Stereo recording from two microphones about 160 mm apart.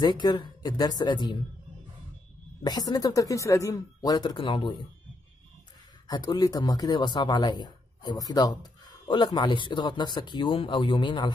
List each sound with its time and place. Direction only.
0.0 s a man's voice: 25° left (ahead or behind)
2.6 s a man's voice: 25° left (ahead or behind)
6.0 s a man's voice: 25° left (ahead or behind)